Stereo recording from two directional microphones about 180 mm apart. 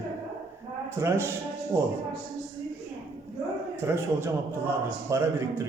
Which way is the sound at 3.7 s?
15° right (ahead or behind).